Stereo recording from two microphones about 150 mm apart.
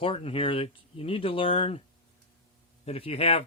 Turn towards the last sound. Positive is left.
turn(degrees=40)  # may be behind; listen again after turning